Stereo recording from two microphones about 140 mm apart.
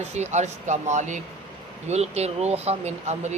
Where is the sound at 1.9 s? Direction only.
50° right (ahead or behind).